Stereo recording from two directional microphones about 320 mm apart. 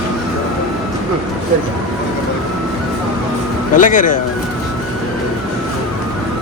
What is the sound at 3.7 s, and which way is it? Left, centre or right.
Speech, left.